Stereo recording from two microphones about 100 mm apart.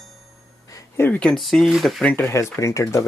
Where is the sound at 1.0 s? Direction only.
15° left (ahead or behind).